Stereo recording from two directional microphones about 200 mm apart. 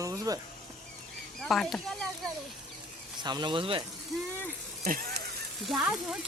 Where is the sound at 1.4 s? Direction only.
Centre (ahead or behind).